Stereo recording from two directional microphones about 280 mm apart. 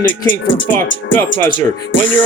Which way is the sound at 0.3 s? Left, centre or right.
Left.